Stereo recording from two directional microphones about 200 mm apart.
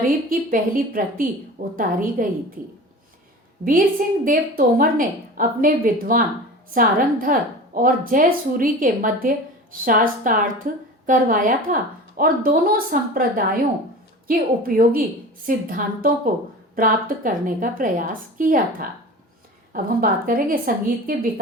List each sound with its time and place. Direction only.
0.3 s a woman's voice: 45° right (ahead or behind)